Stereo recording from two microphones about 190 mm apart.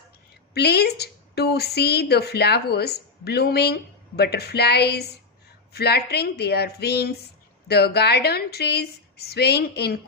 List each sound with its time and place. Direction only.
0.5 s a woman's voice: 60° left (ahead or behind)